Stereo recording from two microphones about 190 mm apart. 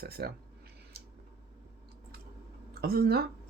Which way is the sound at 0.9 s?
55° right (ahead or behind).